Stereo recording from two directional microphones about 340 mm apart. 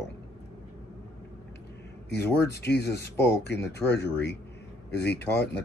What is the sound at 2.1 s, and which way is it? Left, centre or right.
Speech, left.